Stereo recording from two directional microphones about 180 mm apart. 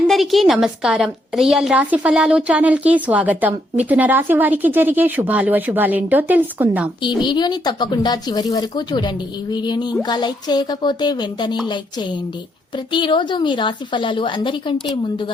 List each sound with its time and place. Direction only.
0.1 s a woman's voice: centre (ahead or behind)
7.0 s a woman's voice: 25° left (ahead or behind)
12.9 s a woman's voice: 25° left (ahead or behind)